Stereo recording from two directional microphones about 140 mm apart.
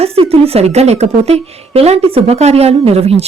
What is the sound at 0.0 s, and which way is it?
A woman's voice, 45° right (ahead or behind).